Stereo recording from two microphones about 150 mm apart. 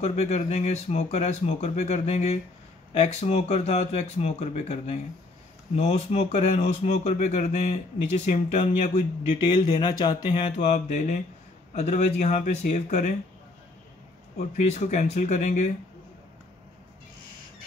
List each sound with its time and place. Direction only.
0.0 s speech: 45° left (ahead or behind)
9.4 s speech: 30° left (ahead or behind)
10.6 s speech: 50° left (ahead or behind)
14.6 s speech: 50° left (ahead or behind)